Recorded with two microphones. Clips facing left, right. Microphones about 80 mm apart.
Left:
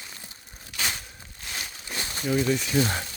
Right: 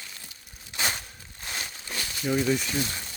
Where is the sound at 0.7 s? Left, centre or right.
Right.